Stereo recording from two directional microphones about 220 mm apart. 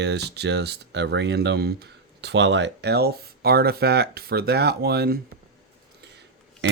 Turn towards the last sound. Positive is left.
turn(degrees=-50)  # may be behind; listen again after turning